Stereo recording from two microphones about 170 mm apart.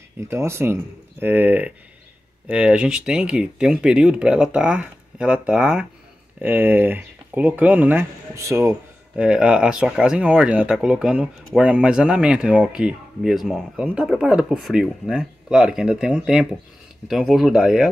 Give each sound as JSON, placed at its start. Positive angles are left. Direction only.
{"t": 0.3, "sound": "speech", "side_deg": -15}
{"t": 9.1, "sound": "speech", "side_deg": -5}